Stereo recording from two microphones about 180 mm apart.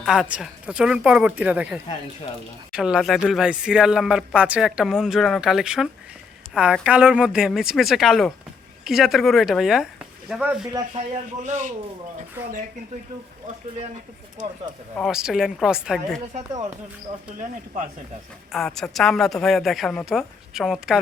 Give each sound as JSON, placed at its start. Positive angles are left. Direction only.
{"t": 0.0, "sound": "a woman's voice", "side_deg": -5}
{"t": 11.4, "sound": "speech", "side_deg": -45}
{"t": 14.4, "sound": "speech", "side_deg": -45}
{"t": 14.9, "sound": "speech", "side_deg": 0}
{"t": 18.5, "sound": "speech", "side_deg": 0}